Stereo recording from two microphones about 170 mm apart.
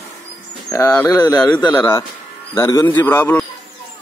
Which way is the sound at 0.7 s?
15° left (ahead or behind).